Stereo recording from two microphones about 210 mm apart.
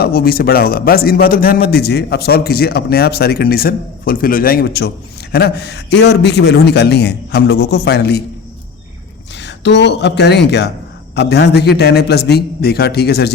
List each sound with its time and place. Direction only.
0.0 s a man's voice: 45° left (ahead or behind)
9.3 s a man's voice: 55° left (ahead or behind)